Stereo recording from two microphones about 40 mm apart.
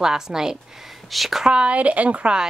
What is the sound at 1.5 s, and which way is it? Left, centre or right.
Speech, right.